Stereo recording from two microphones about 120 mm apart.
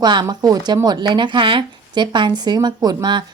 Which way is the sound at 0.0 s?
35° right (ahead or behind).